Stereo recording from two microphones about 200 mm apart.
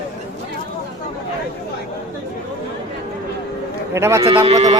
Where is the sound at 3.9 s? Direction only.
15° right (ahead or behind).